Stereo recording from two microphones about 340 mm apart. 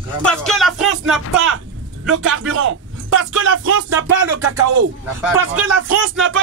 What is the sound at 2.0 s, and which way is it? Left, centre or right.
Speech, right.